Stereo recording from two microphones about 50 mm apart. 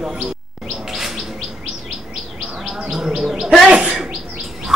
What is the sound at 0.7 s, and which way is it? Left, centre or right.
Bird, centre.